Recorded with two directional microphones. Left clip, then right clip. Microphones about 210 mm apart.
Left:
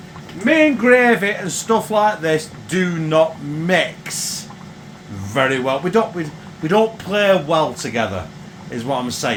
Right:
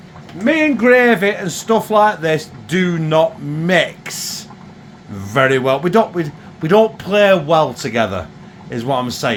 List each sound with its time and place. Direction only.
0.5 s speech: 50° right (ahead or behind); by 9.3 s 30° right (ahead or behind)